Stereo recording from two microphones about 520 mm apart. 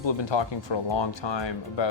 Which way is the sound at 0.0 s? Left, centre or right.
Left.